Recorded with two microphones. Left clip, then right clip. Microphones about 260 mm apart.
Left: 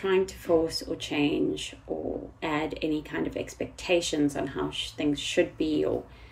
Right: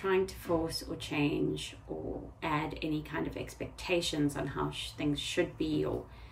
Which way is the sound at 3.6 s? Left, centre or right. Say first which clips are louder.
Left 6 dB; centre.